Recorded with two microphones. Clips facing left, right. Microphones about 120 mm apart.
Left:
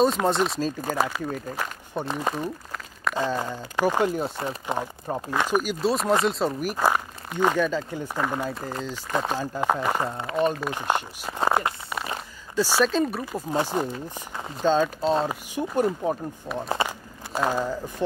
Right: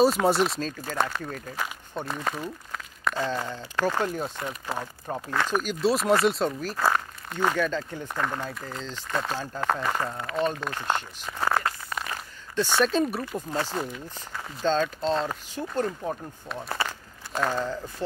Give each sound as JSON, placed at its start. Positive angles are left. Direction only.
{"t": 0.0, "sound": "speech", "side_deg": -5}
{"t": 6.6, "sound": "speech", "side_deg": 15}
{"t": 8.5, "sound": "speech", "side_deg": 35}
{"t": 8.8, "sound": "speech", "side_deg": 10}
{"t": 10.3, "sound": "speech", "side_deg": 10}
{"t": 12.5, "sound": "speech", "side_deg": 5}
{"t": 13.5, "sound": "speech", "side_deg": 20}